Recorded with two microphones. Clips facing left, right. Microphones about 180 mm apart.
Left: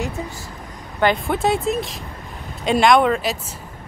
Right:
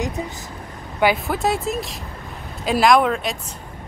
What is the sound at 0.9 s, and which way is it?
Speech, 5° right (ahead or behind).